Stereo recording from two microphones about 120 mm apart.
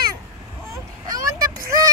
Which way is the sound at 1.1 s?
30° right (ahead or behind).